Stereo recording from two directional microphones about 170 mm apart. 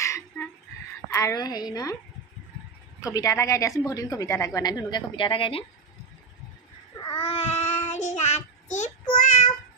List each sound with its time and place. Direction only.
0.0 s a sound: 15° left (ahead or behind)
1.1 s a woman's voice: 20° left (ahead or behind)
3.0 s a woman's voice: 20° left (ahead or behind)
7.1 s child singing: 35° left (ahead or behind)